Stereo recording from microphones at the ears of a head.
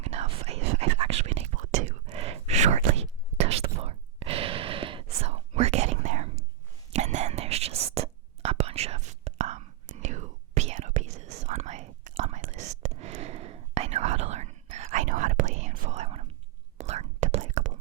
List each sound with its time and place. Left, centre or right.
0.0 s whispering: right